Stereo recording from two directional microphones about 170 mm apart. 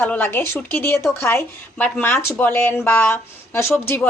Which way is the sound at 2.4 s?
10° left (ahead or behind).